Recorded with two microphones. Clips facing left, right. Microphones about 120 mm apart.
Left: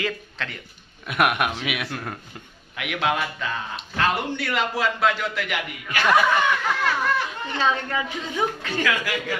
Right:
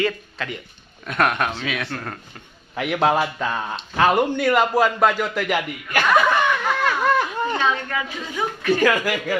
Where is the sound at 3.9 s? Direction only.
50° right (ahead or behind).